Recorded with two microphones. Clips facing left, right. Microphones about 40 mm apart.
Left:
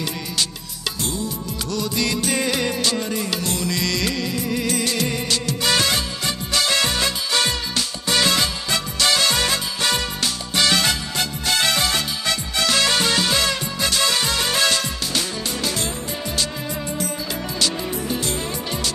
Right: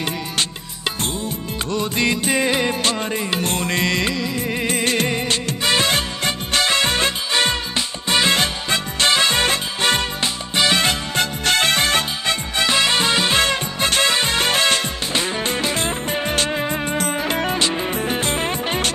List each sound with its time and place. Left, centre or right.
1.0 s music: right
7.8 s music: right
10.2 s music: right
10.8 s music: right
17.6 s music: right